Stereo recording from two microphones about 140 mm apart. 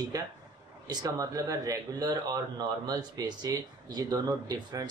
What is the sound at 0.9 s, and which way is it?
Speech, 30° right (ahead or behind).